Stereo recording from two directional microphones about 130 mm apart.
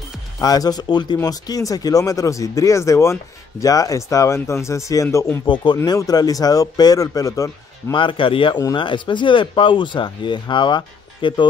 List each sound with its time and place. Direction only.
0.4 s speech: 30° left (ahead or behind)
5.5 s speech: 35° left (ahead or behind)
7.9 s speech: 40° left (ahead or behind)